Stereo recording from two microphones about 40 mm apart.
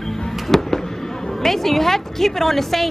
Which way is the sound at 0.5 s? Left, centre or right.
Centre.